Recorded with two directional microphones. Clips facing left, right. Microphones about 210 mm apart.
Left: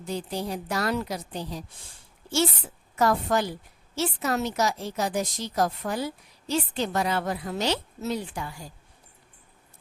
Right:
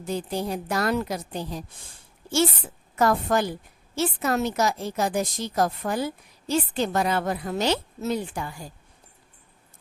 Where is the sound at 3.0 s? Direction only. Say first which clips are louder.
Right 2 dB; 50° right (ahead or behind).